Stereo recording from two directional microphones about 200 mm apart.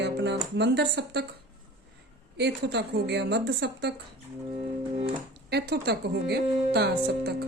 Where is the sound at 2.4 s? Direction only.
55° right (ahead or behind).